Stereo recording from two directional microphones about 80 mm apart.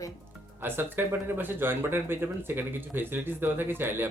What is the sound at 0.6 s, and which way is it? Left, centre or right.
Speech, right.